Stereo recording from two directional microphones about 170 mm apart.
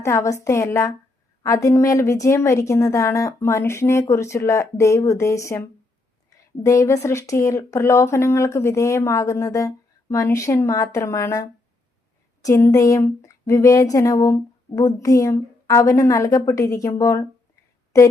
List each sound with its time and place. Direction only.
0.0 s speech: 15° left (ahead or behind)